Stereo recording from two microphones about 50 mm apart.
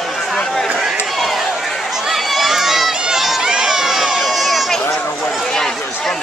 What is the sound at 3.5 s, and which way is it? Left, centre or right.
Crowd, centre.